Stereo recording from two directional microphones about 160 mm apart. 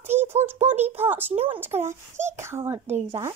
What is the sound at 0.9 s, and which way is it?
Speech, 10° right (ahead or behind).